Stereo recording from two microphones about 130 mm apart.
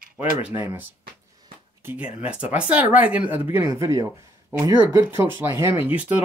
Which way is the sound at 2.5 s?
10° right (ahead or behind).